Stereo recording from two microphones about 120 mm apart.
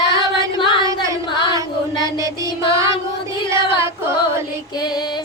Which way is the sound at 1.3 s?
40° left (ahead or behind).